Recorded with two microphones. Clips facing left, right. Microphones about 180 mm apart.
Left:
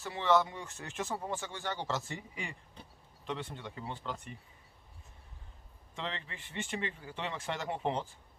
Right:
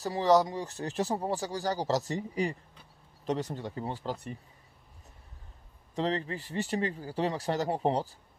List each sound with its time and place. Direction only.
0.0 s speech: 40° right (ahead or behind)
5.9 s speech: 40° right (ahead or behind)